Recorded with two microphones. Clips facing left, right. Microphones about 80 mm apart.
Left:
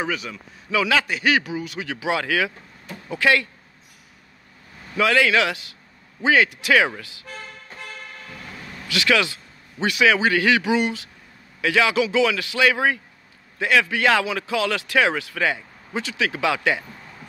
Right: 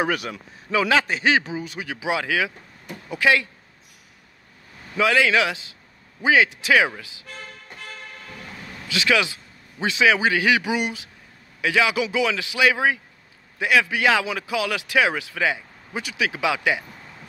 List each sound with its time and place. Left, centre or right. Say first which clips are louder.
0.0 s a man's voice: right 3 dB; right
0.7 s a man's voice: right 1 dB; right
4.9 s a man's voice: even; centre
8.8 s a man's voice: left 1 dB; centre